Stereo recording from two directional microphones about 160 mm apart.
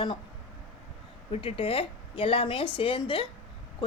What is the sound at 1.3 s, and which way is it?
Speech, 35° left (ahead or behind).